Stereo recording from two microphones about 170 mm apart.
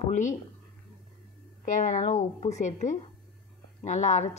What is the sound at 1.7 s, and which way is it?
Speech, 45° left (ahead or behind).